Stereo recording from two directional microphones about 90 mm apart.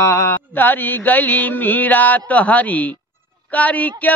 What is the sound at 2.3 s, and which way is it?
A man's voice, 15° left (ahead or behind).